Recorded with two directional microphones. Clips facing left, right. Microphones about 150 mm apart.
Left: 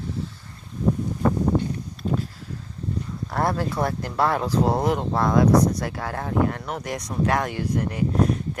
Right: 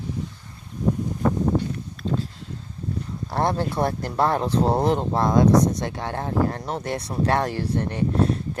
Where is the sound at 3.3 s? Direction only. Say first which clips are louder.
Right 1 dB; 25° right (ahead or behind).